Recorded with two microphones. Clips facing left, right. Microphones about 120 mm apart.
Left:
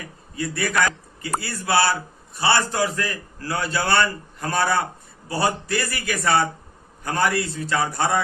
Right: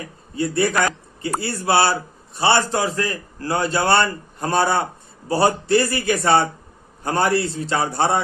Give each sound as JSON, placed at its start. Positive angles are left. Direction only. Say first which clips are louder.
{"t": 0.0, "sound": "a man's voice", "louder": "right 5 dB", "side_deg": -30}